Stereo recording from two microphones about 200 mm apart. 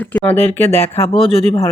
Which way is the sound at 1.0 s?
30° left (ahead or behind).